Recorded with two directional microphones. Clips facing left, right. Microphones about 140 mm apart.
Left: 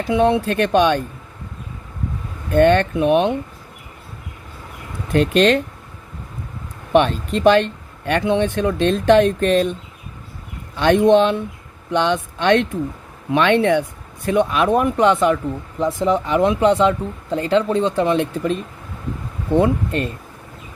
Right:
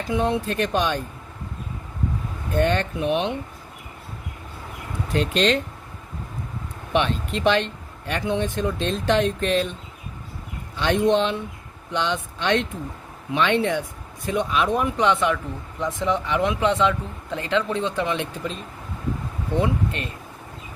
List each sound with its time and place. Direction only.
0.1 s speech: 70° left (ahead or behind)
2.6 s speech: 60° left (ahead or behind)
5.1 s speech: 55° left (ahead or behind)
6.9 s speech: 45° left (ahead or behind)
10.8 s speech: 55° left (ahead or behind); by 18.3 s 40° left (ahead or behind)
19.5 s speech: 45° left (ahead or behind)